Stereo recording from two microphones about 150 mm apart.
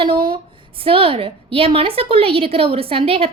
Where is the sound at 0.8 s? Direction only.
35° right (ahead or behind).